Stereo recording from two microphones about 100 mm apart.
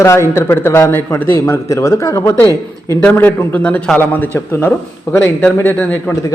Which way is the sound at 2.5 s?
40° right (ahead or behind).